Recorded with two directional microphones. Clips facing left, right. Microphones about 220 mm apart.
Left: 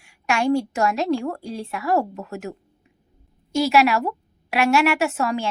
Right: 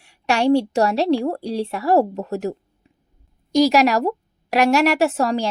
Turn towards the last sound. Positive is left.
turn(degrees=-35)  # may be behind; listen again after turning